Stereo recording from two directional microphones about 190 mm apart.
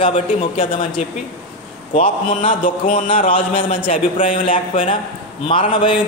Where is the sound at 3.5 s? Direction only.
30° left (ahead or behind).